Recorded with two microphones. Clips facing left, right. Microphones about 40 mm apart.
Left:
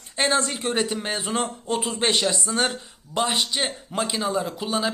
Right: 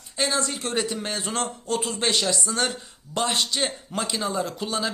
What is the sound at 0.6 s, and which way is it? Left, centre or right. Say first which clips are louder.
A man's voice: left 2 dB; left.